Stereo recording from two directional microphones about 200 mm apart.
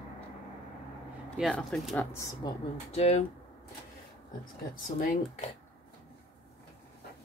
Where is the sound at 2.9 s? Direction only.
30° left (ahead or behind).